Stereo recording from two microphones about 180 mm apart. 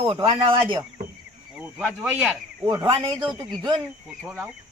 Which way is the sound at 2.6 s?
30° right (ahead or behind).